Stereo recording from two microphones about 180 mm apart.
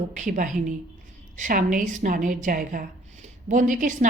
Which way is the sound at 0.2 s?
45° right (ahead or behind).